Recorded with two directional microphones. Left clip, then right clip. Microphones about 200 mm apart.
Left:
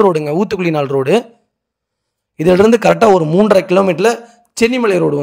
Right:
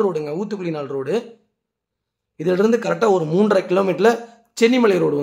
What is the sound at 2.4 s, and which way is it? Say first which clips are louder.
A man's voice: left 8 dB; 40° left (ahead or behind).